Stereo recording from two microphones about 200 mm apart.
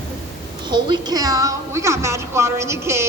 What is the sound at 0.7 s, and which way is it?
A woman's voice, 20° right (ahead or behind).